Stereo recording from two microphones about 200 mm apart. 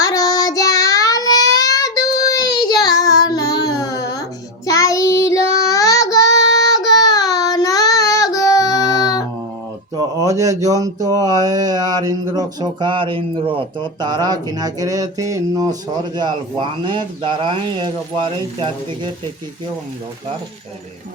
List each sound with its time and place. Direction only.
0.0 s child singing: 20° left (ahead or behind)
10.2 s speech: 15° right (ahead or behind)